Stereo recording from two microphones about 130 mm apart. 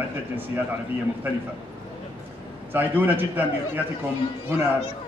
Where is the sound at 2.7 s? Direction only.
15° right (ahead or behind).